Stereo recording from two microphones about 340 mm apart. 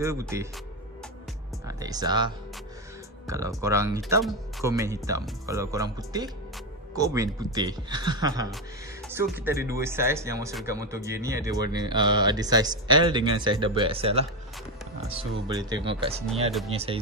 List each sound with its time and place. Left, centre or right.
0.0 s speech: centre
1.7 s speech: centre